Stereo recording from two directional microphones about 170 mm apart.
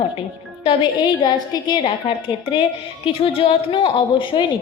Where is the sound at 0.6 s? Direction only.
30° left (ahead or behind).